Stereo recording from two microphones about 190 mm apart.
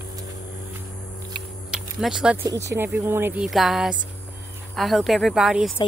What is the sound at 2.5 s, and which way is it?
Speech, 15° right (ahead or behind).